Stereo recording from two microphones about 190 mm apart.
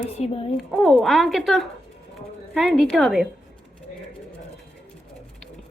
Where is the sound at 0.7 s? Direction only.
Centre (ahead or behind).